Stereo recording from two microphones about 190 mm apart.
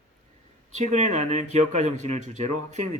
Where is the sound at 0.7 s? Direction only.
40° right (ahead or behind).